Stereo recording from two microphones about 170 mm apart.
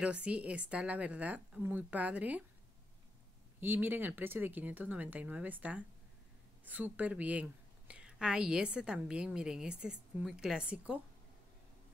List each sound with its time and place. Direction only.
0.0 s speech: 5° right (ahead or behind)
3.6 s a woman's voice: 10° right (ahead or behind)